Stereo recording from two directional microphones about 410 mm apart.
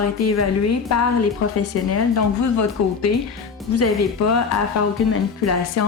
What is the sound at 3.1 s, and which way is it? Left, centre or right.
A woman's voice, left.